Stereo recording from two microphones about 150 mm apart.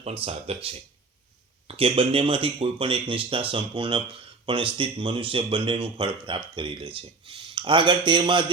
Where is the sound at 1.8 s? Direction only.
40° right (ahead or behind).